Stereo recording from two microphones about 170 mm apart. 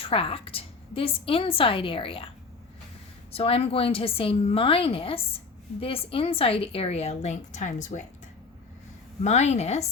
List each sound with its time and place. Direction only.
0.0 s a woman's voice: 35° left (ahead or behind)
3.3 s a woman's voice: 35° left (ahead or behind)
9.2 s a woman's voice: 40° left (ahead or behind)